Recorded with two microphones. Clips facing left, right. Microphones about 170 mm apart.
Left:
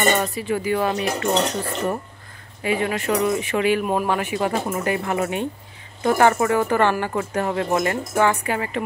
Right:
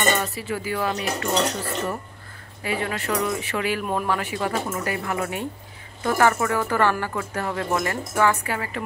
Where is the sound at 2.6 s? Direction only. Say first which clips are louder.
Left 4 dB; 20° left (ahead or behind).